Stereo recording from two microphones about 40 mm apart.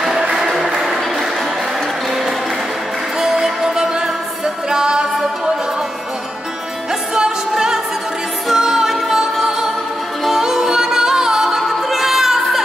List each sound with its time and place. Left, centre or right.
0.6 s a sound: centre
2.0 s music: centre
6.9 s music: centre